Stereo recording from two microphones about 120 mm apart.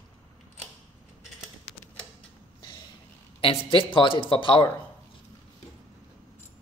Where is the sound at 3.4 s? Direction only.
45° left (ahead or behind).